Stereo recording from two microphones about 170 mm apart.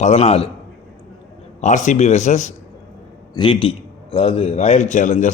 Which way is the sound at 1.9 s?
40° left (ahead or behind).